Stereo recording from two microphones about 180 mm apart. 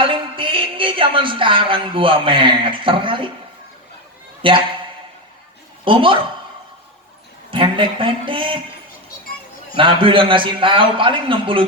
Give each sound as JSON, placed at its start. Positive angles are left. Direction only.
{"t": 0.0, "sound": "music", "side_deg": -30}
{"t": 4.4, "sound": "a man's voice", "side_deg": -30}
{"t": 5.8, "sound": "a man's voice", "side_deg": -30}
{"t": 7.5, "sound": "a man's voice", "side_deg": -30}
{"t": 9.7, "sound": "a man's voice", "side_deg": -30}